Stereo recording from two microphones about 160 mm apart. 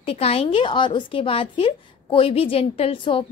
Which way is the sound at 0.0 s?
40° left (ahead or behind).